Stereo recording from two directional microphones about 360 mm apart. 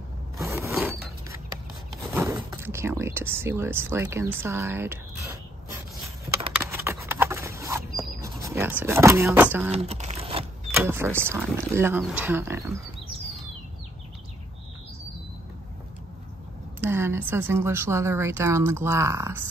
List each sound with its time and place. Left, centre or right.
0.4 s mechanisms: centre
2.1 s speech: centre
6.0 s a sound: centre
9.7 s crumpling: centre
10.7 s a woman's voice: centre
16.8 s a woman's voice: centre